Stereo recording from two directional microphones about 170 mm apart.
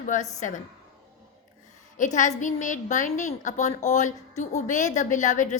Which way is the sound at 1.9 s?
45° left (ahead or behind).